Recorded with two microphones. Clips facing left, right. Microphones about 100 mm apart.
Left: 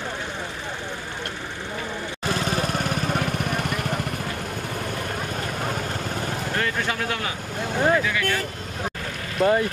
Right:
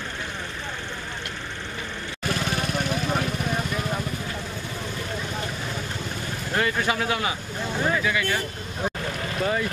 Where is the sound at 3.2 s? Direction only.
60° left (ahead or behind).